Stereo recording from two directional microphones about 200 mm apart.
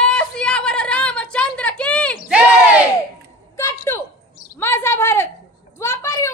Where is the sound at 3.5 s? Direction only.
15° left (ahead or behind).